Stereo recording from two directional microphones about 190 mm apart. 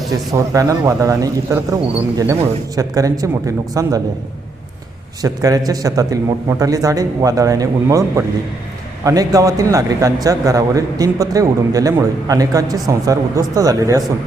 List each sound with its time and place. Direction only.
0.1 s a man's voice: 15° right (ahead or behind)
5.2 s a man's voice: 20° right (ahead or behind)